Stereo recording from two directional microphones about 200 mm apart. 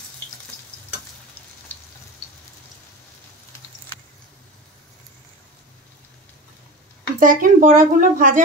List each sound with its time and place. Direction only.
7.2 s speech: 40° right (ahead or behind)